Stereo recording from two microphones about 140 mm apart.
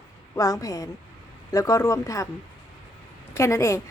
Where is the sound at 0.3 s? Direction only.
25° left (ahead or behind).